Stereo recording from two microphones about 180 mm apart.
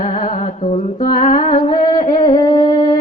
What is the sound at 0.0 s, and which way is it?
Humming, 45° left (ahead or behind).